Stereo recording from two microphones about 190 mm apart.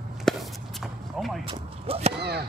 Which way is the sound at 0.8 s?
Centre (ahead or behind).